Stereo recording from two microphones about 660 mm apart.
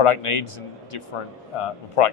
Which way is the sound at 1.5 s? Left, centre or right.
Left.